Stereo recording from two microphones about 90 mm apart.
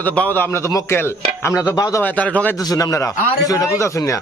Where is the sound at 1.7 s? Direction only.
40° left (ahead or behind).